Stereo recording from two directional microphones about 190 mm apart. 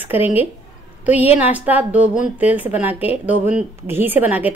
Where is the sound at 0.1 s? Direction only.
10° right (ahead or behind).